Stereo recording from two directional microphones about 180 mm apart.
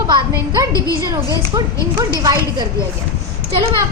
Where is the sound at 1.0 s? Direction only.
20° right (ahead or behind).